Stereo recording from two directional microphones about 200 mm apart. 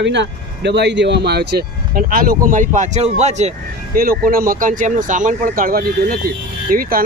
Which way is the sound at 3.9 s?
45° right (ahead or behind).